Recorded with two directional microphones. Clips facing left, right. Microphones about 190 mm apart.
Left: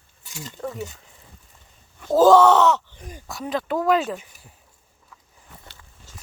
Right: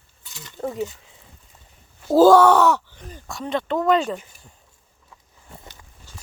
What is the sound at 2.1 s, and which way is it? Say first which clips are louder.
Speech: right 1 dB; 10° right (ahead or behind).